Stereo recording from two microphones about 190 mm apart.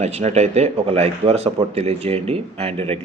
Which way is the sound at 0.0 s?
35° right (ahead or behind).